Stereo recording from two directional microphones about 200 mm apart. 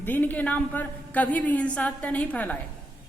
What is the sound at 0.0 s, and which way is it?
A man's voice, 10° left (ahead or behind).